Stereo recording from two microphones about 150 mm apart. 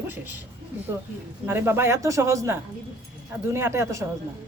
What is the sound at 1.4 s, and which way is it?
A woman's voice, 15° right (ahead or behind).